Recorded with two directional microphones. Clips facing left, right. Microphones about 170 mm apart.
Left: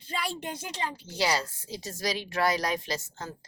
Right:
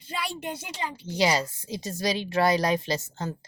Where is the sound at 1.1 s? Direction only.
15° right (ahead or behind).